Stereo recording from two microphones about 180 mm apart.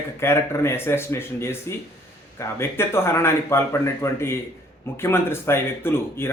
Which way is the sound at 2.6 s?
15° left (ahead or behind).